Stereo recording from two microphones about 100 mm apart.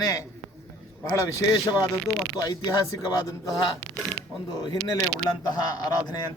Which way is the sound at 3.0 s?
45° left (ahead or behind).